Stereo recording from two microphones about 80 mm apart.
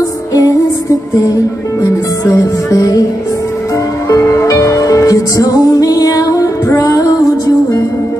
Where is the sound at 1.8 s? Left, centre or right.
Left.